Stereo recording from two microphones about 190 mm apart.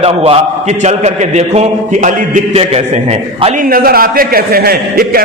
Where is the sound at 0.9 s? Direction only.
35° right (ahead or behind).